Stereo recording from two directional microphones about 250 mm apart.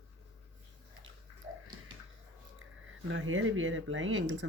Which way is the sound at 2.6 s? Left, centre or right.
Right.